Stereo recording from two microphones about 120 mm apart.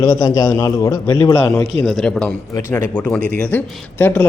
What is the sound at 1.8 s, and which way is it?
Speech, 5° left (ahead or behind).